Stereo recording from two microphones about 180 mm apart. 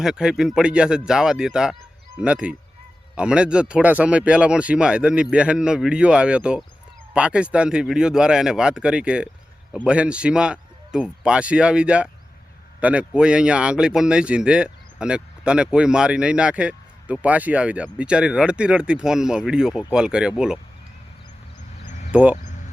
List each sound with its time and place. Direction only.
0.0 s speech: 5° right (ahead or behind)
21.8 s a sound: 40° left (ahead or behind)
22.1 s speech: 10° right (ahead or behind)